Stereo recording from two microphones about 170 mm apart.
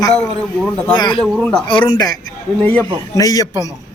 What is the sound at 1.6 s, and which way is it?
A man's voice, 25° left (ahead or behind).